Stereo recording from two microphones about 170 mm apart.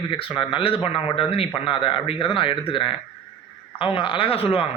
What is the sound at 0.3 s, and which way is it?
A man's voice, 30° left (ahead or behind).